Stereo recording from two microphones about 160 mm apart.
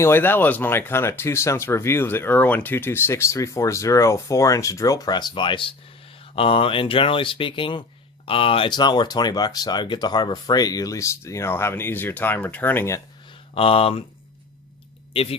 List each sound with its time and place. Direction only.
0.0 s speech: 15° left (ahead or behind)
13.5 s speech: 35° left (ahead or behind)
15.1 s speech: 35° left (ahead or behind)